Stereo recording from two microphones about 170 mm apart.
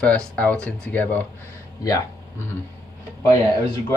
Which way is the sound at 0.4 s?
10° left (ahead or behind).